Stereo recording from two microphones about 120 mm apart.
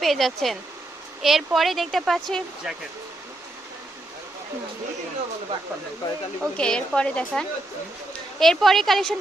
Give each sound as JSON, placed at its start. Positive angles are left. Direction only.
{"t": 0.0, "sound": "speech", "side_deg": 0}
{"t": 6.0, "sound": "speech", "side_deg": 35}
{"t": 6.4, "sound": "a woman's voice", "side_deg": 5}